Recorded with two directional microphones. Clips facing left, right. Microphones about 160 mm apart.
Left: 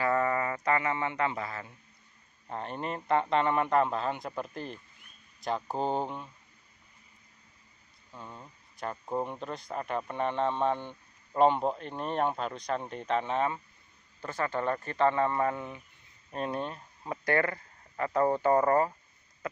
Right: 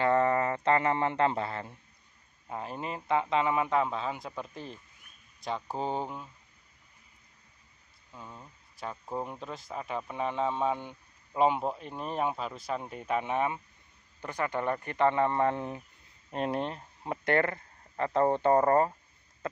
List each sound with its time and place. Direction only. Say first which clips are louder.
0.0 s a man's voice: right 3 dB; 30° right (ahead or behind)
2.4 s speech: left 1 dB; 5° right (ahead or behind)
8.1 s speech: left 1 dB; centre (ahead or behind); by 18.9 s 30° right (ahead or behind)
19.4 s a sound: right 1 dB; 25° right (ahead or behind)